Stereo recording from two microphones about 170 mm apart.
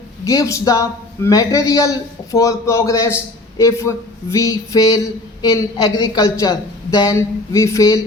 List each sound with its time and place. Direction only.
0.3 s a man's voice: 20° left (ahead or behind)